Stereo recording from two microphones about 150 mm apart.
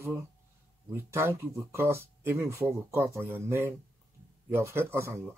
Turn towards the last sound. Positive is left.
turn(degrees=-15)  # may be behind; listen again after turning